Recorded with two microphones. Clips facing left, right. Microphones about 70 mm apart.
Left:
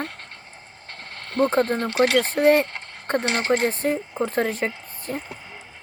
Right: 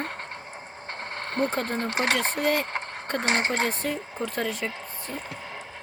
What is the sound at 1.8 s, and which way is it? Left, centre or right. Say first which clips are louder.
Speech: left 6 dB; right.